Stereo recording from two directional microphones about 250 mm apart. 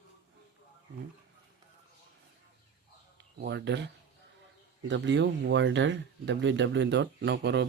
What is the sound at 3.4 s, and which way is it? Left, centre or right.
Speech, right.